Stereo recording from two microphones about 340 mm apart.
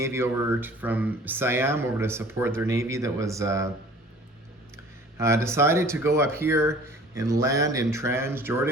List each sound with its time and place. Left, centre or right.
0.0 s speech: centre
5.1 s speech: centre